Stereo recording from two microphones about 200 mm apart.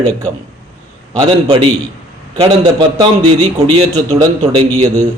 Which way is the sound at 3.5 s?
30° right (ahead or behind).